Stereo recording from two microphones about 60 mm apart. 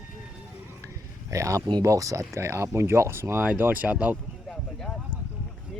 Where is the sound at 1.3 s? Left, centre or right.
Right.